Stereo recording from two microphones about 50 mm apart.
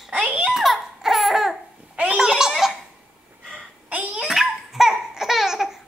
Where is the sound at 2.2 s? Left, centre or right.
Centre.